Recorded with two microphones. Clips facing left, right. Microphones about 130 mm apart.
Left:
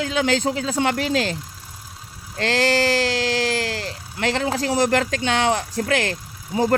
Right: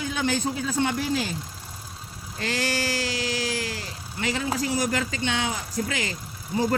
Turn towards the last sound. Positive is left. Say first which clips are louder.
# left 5 dB
turn(degrees=70)  # may be behind; listen again after turning